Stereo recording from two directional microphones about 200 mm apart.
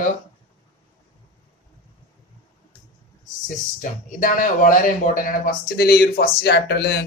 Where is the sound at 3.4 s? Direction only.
40° left (ahead or behind); by 7.1 s 60° left (ahead or behind).